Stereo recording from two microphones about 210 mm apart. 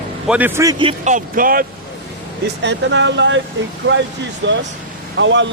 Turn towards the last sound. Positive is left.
turn(degrees=-60)  # may be behind; listen again after turning